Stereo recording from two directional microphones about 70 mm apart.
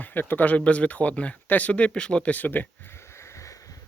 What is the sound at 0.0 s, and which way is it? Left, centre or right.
Speech, left.